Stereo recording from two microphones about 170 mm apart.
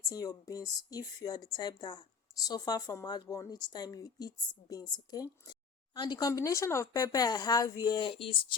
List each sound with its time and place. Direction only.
0.1 s a woman's voice: 20° left (ahead or behind)